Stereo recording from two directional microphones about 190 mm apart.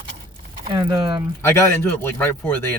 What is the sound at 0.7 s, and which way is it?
Speech, 20° right (ahead or behind).